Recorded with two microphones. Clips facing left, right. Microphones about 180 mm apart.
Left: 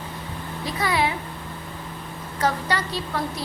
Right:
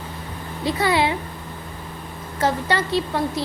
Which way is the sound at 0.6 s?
30° right (ahead or behind).